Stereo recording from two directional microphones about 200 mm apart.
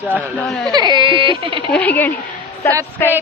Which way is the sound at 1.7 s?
10° left (ahead or behind).